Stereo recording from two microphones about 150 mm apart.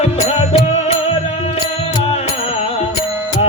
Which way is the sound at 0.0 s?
40° left (ahead or behind).